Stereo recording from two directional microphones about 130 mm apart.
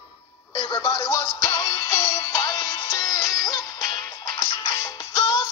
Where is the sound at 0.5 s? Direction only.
30° left (ahead or behind).